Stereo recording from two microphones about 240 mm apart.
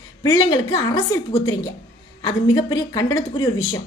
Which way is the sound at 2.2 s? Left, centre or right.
Centre.